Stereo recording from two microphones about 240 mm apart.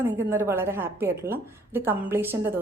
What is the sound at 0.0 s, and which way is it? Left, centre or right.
A woman's voice, centre.